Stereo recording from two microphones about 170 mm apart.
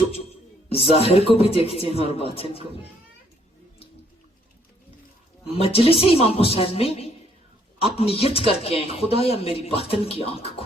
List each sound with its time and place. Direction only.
0.7 s a woman's voice: 35° left (ahead or behind)
5.9 s a woman's voice: 35° left (ahead or behind)